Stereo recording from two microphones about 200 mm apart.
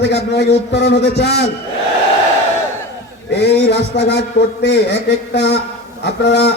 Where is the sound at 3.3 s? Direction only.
60° left (ahead or behind).